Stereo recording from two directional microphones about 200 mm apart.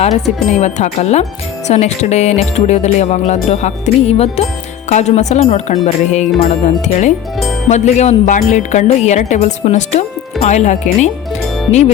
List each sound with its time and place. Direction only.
0.5 s music: 35° left (ahead or behind)